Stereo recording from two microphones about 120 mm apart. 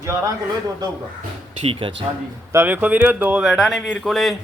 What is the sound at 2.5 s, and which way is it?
Speech, 15° right (ahead or behind).